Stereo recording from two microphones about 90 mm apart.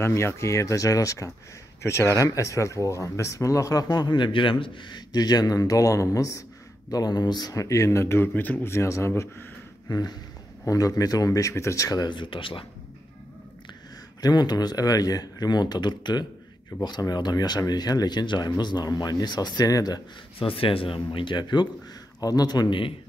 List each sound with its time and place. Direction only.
0.0 s speech: 30° left (ahead or behind)
10.7 s speech: 40° left (ahead or behind)
12.1 s speech: 65° left (ahead or behind)
14.2 s speech: 50° left (ahead or behind)
20.3 s speech: 90° left; by 21.6 s 55° left (ahead or behind)
22.2 s speech: 45° left (ahead or behind)